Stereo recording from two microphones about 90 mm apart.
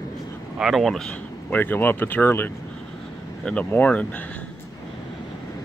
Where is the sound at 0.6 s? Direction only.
Centre (ahead or behind).